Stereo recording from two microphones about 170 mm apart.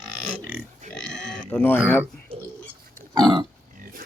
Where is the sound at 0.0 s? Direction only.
5° left (ahead or behind).